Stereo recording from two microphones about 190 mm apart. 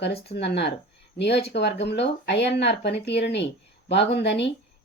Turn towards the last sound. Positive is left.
turn(degrees=65)  # may be behind; listen again after turning